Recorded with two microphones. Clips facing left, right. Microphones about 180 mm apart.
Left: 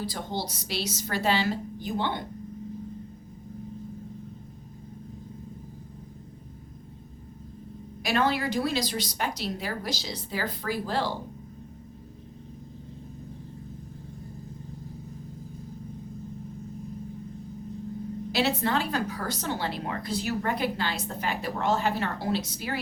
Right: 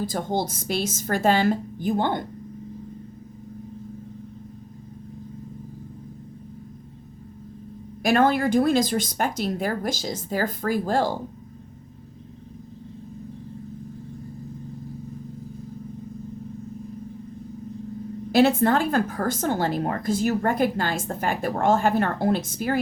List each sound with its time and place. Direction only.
0.0 s a woman's voice: 50° right (ahead or behind)
8.0 s a woman's voice: 50° right (ahead or behind)
18.3 s a woman's voice: 50° right (ahead or behind)